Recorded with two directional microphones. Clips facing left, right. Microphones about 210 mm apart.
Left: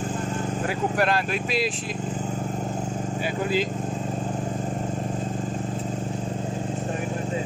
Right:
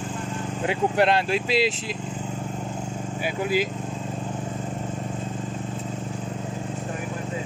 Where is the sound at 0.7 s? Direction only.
25° right (ahead or behind).